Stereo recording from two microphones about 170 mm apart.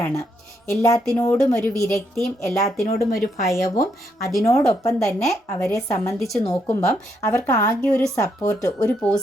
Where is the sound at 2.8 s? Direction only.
55° left (ahead or behind).